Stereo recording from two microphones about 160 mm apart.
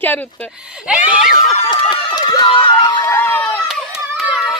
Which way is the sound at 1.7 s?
30° left (ahead or behind).